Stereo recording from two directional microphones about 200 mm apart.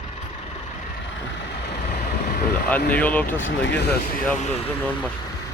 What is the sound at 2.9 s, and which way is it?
Speech, 10° left (ahead or behind).